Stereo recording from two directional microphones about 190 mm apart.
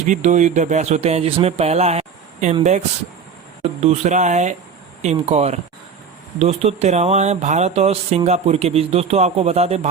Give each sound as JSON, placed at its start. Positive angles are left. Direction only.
{"t": 0.1, "sound": "speech", "side_deg": -40}